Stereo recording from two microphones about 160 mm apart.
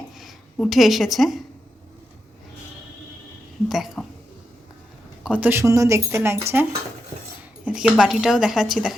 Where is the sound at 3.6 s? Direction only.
Centre (ahead or behind).